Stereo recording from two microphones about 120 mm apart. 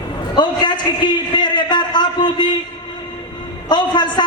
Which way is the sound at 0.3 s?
40° left (ahead or behind).